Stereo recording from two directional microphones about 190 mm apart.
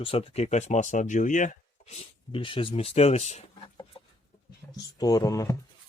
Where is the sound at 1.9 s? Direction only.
30° left (ahead or behind).